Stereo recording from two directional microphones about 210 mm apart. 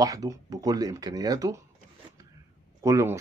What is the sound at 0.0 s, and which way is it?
Speech, 15° right (ahead or behind).